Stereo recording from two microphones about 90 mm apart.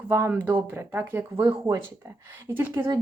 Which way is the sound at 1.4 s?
45° right (ahead or behind).